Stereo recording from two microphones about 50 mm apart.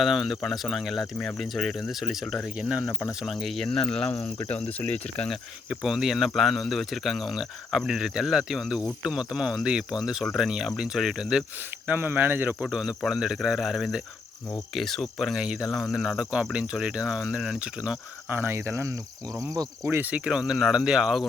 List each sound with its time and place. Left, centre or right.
0.0 s speech: centre
2.6 s cricket: right
3.2 s speech: centre
3.7 s cricket: centre
5.8 s speech: centre
7.9 s cricket: centre
11.9 s speech: right
13.1 s cricket: centre
14.8 s speech: centre
15.4 s cricket: centre
18.3 s speech: right
18.5 s cricket: right
20.0 s speech: right
20.2 s cricket: centre